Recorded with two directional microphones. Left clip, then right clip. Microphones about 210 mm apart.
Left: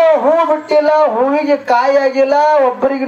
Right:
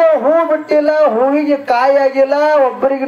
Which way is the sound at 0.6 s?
35° left (ahead or behind).